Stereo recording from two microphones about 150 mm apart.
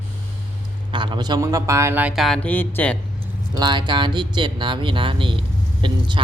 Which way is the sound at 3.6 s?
30° right (ahead or behind).